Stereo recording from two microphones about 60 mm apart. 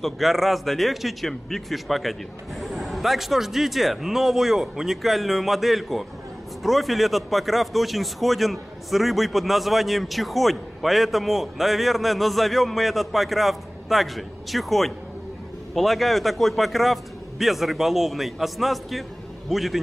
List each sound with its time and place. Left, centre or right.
0.0 s speech: centre